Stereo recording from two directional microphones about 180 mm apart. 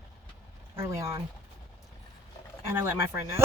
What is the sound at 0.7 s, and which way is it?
Speech, 15° right (ahead or behind).